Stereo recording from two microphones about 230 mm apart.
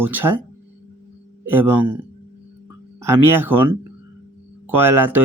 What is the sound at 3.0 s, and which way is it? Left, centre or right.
Speech, centre.